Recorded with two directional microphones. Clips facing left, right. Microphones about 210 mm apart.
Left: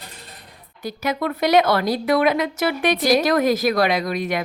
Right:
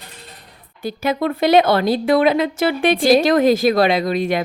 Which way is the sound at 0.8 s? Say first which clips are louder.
Right 4 dB; 30° right (ahead or behind).